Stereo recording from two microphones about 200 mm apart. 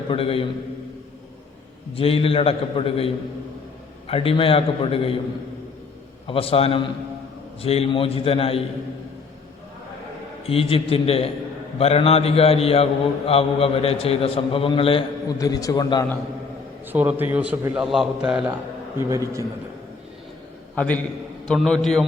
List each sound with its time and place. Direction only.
0.1 s a man's voice: 25° left (ahead or behind)
2.0 s a man's voice: 30° left (ahead or behind)
4.1 s a man's voice: 25° left (ahead or behind)
6.2 s a man's voice: 30° left (ahead or behind)
10.4 s a man's voice: 30° left (ahead or behind)
16.9 s a man's voice: 10° right (ahead or behind)
18.9 s a man's voice: 15° right (ahead or behind)
20.7 s a man's voice: 5° left (ahead or behind)